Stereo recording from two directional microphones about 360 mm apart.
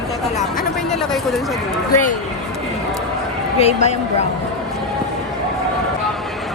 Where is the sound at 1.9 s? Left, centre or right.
Left.